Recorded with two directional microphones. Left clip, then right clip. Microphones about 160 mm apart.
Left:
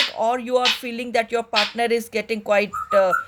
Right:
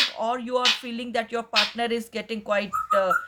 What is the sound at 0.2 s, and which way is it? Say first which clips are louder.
Music: left 5 dB; 35° left (ahead or behind).